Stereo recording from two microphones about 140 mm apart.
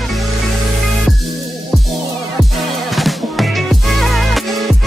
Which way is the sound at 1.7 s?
Centre (ahead or behind).